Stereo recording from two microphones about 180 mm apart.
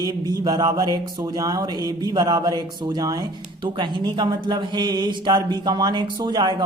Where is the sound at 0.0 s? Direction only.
20° right (ahead or behind).